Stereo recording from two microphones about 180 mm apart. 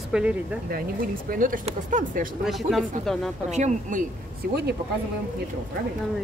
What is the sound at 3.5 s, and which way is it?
Speech, 45° right (ahead or behind).